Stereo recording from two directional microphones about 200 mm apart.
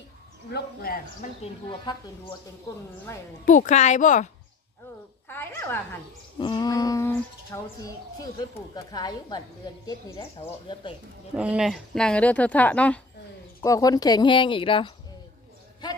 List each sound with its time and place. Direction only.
0.5 s speech: 45° left (ahead or behind)
1.8 s speech: 20° left (ahead or behind)
3.4 s speech: 40° left (ahead or behind)
5.3 s a sound: 10° left (ahead or behind)
6.4 s speech: 20° left (ahead or behind)
11.3 s speech: 5° right (ahead or behind)
13.6 s speech: 20° left (ahead or behind)